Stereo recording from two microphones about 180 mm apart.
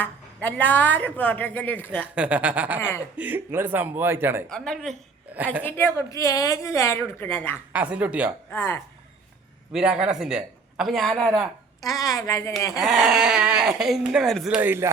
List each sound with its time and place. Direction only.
0.4 s a woman's voice: 10° left (ahead or behind)
2.1 s a man's voice: 5° right (ahead or behind)
4.4 s speech: 5° left (ahead or behind)
5.6 s a woman's voice: 15° left (ahead or behind)
7.7 s a man's voice: 10° right (ahead or behind)
8.5 s a woman's voice: 15° left (ahead or behind)
9.7 s speech: 5° right (ahead or behind)
11.8 s a woman's voice: 20° left (ahead or behind)
12.8 s speech: centre (ahead or behind)